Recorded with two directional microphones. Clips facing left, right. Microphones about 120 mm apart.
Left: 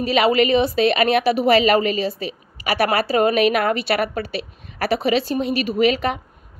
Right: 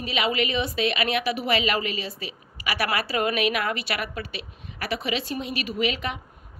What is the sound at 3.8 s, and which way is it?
Speech, 55° left (ahead or behind).